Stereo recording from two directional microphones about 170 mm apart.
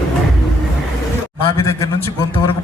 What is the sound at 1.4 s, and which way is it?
Speech, 15° left (ahead or behind).